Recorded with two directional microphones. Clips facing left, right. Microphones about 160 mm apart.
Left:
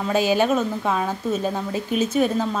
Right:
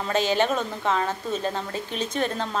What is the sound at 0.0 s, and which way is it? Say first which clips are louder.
A woman's voice: left 3 dB; 10° left (ahead or behind).